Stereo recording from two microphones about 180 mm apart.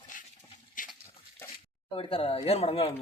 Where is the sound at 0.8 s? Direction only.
50° left (ahead or behind).